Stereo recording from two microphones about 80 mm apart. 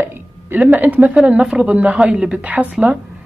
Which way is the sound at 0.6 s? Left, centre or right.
Centre.